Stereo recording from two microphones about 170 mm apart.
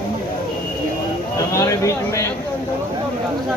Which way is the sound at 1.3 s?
20° left (ahead or behind).